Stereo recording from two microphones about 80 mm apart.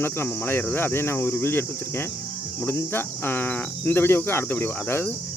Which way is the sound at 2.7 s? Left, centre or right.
Left.